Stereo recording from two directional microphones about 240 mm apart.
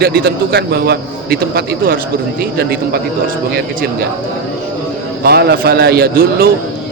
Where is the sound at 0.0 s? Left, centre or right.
Right.